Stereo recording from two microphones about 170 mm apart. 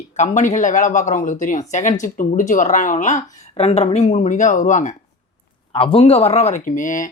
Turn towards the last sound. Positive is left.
turn(degrees=50)  # may be behind; listen again after turning